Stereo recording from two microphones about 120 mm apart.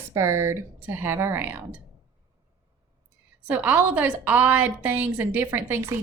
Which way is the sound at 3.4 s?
15° right (ahead or behind).